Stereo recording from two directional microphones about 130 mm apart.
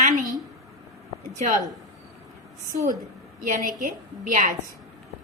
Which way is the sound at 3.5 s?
90° right.